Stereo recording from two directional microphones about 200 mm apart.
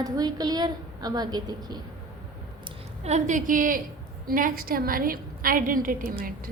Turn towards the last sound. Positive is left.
turn(degrees=-45)  # may be behind; listen again after turning